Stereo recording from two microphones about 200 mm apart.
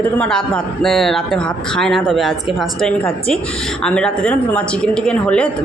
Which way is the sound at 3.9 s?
5° left (ahead or behind).